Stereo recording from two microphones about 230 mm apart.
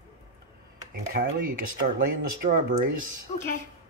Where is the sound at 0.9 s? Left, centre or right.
Right.